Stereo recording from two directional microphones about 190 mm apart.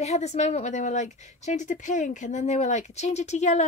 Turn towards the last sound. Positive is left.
turn(degrees=35)  # may be behind; listen again after turning